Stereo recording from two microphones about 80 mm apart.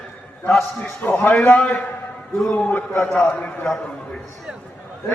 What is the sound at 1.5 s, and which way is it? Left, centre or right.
Speech, centre.